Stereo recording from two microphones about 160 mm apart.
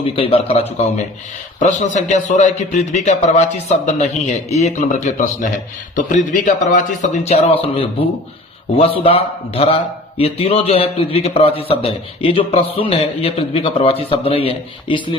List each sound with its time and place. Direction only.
0.0 s a man's voice: 35° left (ahead or behind)
1.5 s a man's voice: 50° left (ahead or behind); by 15.0 s 35° left (ahead or behind)